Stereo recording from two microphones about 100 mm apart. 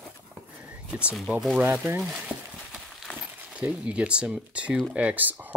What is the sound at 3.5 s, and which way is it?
Speech, 15° right (ahead or behind).